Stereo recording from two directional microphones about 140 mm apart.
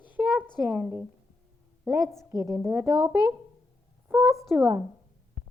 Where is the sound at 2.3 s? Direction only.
25° right (ahead or behind).